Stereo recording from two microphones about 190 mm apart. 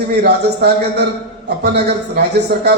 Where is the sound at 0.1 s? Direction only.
55° right (ahead or behind).